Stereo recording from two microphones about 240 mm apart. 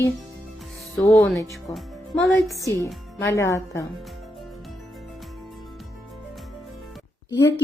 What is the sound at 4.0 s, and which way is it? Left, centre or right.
Music, centre.